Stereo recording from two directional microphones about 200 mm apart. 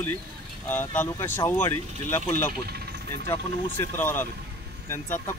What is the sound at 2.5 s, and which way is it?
Vehicle, 50° right (ahead or behind).